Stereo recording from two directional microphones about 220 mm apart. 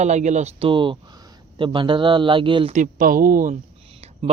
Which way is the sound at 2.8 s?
40° right (ahead or behind).